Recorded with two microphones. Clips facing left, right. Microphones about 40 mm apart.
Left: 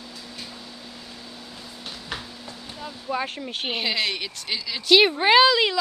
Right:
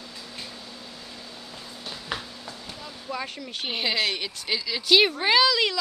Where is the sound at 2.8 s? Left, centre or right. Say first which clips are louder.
Left 6 dB; left.